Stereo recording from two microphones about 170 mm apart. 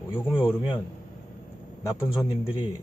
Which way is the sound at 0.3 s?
25° left (ahead or behind).